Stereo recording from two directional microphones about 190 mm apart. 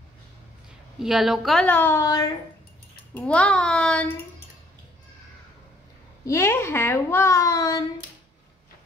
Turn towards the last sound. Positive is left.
turn(degrees=20)  # may be behind; listen again after turning